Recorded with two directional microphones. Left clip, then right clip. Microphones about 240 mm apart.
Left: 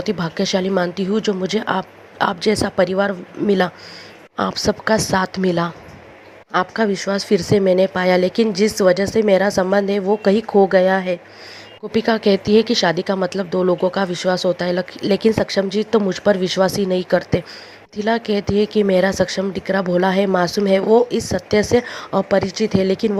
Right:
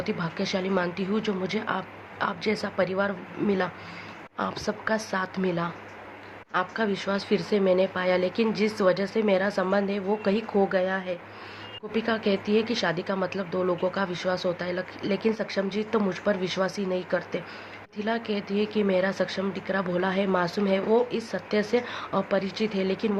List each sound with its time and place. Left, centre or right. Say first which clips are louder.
0.0 s speech: left 8 dB; left